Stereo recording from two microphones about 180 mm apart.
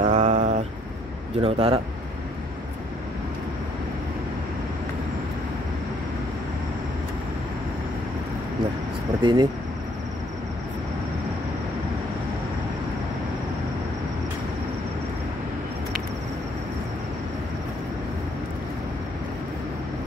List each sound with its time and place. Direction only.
0.0 s a sound: 40° right (ahead or behind)
1.4 s speech: 35° right (ahead or behind)
9.2 s speech: 25° right (ahead or behind)